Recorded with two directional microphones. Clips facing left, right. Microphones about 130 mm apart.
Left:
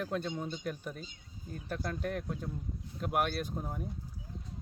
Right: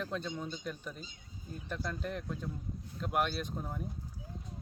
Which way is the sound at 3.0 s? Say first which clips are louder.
Left 1 dB; 5° left (ahead or behind).